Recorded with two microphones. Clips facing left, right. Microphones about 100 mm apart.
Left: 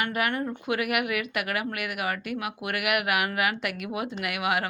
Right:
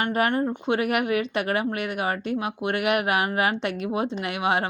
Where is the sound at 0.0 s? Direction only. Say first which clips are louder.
Right 5 dB; 35° right (ahead or behind).